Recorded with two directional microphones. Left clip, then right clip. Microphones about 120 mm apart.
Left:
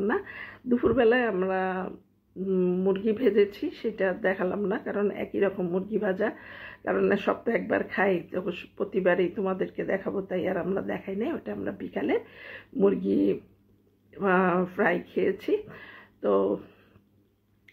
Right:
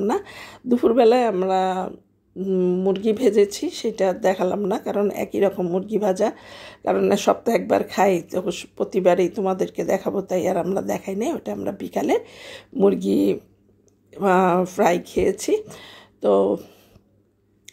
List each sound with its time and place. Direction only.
0.0 s speech: 50° right (ahead or behind)